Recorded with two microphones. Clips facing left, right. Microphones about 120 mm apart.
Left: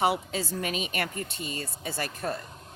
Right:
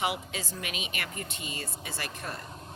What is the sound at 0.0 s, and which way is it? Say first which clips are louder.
Speech: left 6 dB; 35° left (ahead or behind).